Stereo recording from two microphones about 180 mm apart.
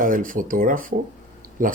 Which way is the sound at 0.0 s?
50° right (ahead or behind).